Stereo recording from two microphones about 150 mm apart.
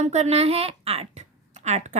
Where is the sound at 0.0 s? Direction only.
45° right (ahead or behind).